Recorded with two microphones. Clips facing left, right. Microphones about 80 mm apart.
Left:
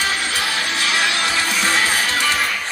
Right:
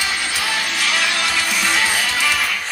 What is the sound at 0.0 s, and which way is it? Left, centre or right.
Music, left.